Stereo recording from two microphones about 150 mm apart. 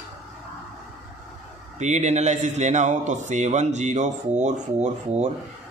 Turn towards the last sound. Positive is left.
turn(degrees=-50)  # may be behind; listen again after turning